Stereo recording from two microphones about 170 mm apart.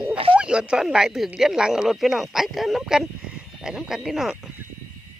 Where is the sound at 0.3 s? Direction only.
5° right (ahead or behind).